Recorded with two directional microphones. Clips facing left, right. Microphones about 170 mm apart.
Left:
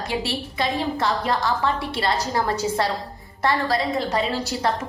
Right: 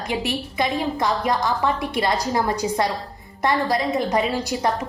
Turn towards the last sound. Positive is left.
turn(degrees=-15)  # may be behind; listen again after turning